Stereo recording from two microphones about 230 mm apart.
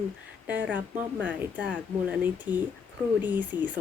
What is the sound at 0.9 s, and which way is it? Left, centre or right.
Speech, centre.